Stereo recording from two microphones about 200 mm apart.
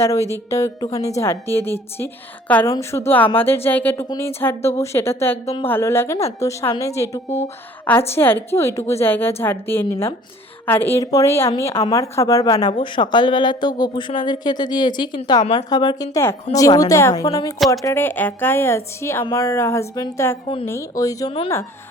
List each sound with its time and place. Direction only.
0.0 s a woman's voice: 15° left (ahead or behind)
7.3 s speech: 35° left (ahead or behind)
8.1 s a woman's voice: 10° left (ahead or behind)